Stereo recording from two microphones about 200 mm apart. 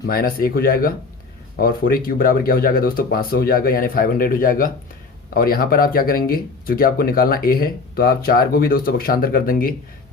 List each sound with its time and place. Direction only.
0.0 s speech: 50° left (ahead or behind)